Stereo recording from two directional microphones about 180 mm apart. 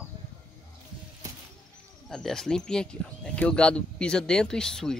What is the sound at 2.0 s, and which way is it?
Speech, centre (ahead or behind).